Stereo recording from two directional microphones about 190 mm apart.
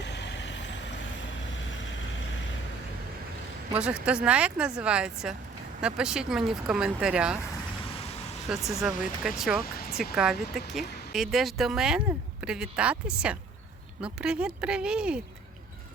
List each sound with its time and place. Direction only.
0.0 s vehicle: 65° left (ahead or behind)
3.8 s speech: 5° right (ahead or behind)
8.4 s speech: centre (ahead or behind)